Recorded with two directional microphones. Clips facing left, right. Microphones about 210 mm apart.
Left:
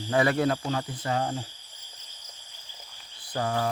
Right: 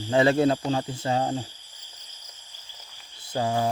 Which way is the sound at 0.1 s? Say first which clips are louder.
Right 4 dB; 25° right (ahead or behind).